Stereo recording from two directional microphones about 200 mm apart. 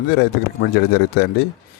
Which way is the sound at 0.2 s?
55° left (ahead or behind).